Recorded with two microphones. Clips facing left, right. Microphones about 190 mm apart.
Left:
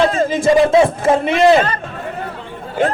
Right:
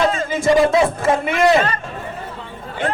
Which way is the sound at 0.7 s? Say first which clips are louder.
Left 4 dB; 30° left (ahead or behind).